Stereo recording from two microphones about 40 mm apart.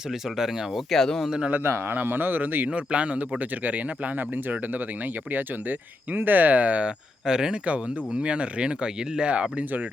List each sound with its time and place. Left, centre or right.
0.1 s speech: centre
0.7 s speech: centre
2.0 s speech: right
2.6 s speech: right
6.8 s speech: centre
7.6 s speech: right